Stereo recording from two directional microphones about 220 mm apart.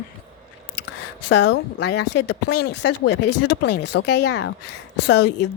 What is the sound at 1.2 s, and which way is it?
Speech, 50° left (ahead or behind).